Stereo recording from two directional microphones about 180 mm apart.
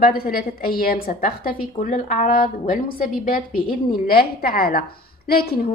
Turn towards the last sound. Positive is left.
turn(degrees=60)  # may be behind; listen again after turning